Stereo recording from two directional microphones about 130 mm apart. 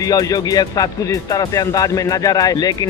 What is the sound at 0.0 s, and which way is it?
Speech, 30° left (ahead or behind).